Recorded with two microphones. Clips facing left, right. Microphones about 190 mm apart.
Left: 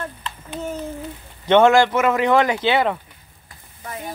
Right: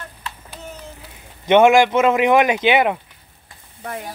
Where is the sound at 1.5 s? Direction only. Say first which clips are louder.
Right 1 dB; 15° right (ahead or behind).